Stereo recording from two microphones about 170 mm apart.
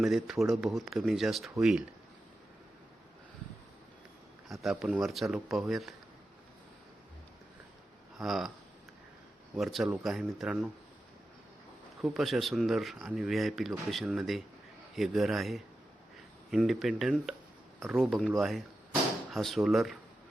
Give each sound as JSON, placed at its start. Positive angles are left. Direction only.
{"t": 0.0, "sound": "speech", "side_deg": 0}
{"t": 4.4, "sound": "speech", "side_deg": 0}
{"t": 8.2, "sound": "speech", "side_deg": 0}
{"t": 9.6, "sound": "speech", "side_deg": 0}
{"t": 12.0, "sound": "speech", "side_deg": 0}